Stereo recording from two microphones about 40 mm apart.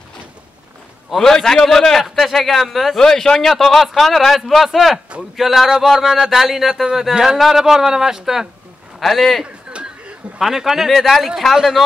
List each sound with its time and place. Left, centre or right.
1.1 s a man's voice: centre
3.0 s a man's voice: centre
9.0 s speech: centre
9.7 s a sound: right
10.4 s speech: centre
10.9 s speech: centre